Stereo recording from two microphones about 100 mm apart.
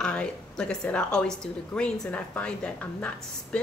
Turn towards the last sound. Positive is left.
turn(degrees=15)  # may be behind; listen again after turning